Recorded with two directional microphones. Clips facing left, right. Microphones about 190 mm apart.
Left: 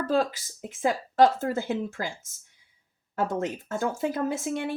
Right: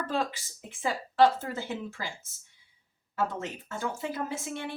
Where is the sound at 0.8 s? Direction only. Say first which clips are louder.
Left 3 dB; 45° left (ahead or behind).